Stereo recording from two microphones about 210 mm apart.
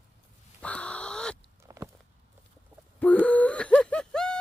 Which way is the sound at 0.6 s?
5° left (ahead or behind).